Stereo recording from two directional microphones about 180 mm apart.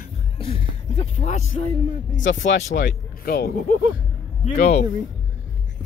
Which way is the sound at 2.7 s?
45° left (ahead or behind).